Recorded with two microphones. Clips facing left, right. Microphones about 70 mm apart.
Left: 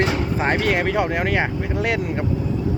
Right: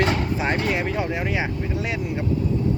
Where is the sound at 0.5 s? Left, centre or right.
Left.